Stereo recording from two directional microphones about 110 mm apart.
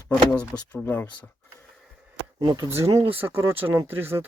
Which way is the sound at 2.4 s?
40° right (ahead or behind).